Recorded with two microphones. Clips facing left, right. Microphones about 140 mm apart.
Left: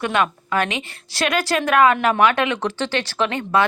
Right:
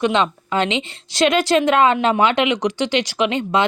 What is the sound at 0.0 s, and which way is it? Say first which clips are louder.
A woman's voice: right 3 dB; 20° right (ahead or behind).